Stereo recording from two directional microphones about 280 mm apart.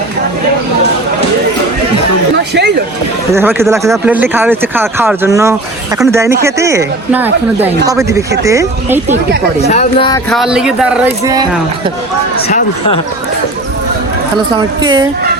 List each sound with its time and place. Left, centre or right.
2.3 s chatter: right
3.3 s speech: centre
9.6 s speech: left
10.2 s speech: centre
14.3 s speech: centre